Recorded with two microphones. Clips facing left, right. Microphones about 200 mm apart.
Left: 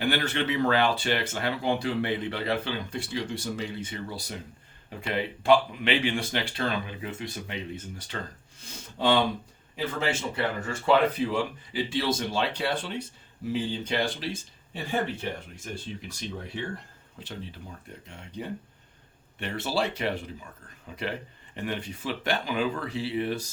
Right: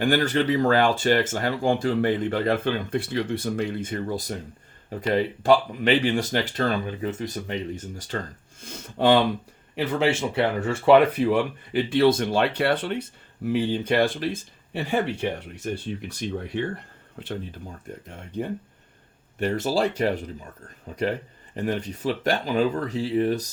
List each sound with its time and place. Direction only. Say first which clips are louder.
0.0 s speech: right 6 dB; 45° right (ahead or behind)
8.6 s speech: right 5 dB; 55° right (ahead or behind)
17.2 s speech: right 6 dB; 60° right (ahead or behind); by 23.5 s 40° right (ahead or behind)